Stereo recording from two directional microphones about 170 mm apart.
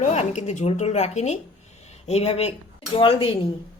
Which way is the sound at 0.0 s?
40° left (ahead or behind).